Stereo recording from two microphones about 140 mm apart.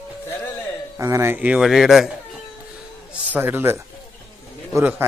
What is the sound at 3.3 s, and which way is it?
Speech, 15° right (ahead or behind).